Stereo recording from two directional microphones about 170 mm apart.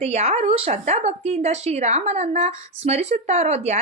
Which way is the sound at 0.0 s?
40° right (ahead or behind).